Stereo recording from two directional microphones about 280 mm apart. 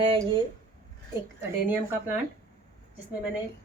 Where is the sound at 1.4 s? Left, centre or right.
Centre.